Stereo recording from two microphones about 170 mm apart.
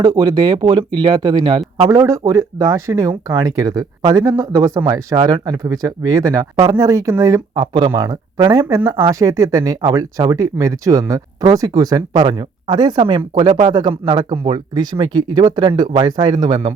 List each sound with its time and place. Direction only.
0.0 s speech: 25° right (ahead or behind)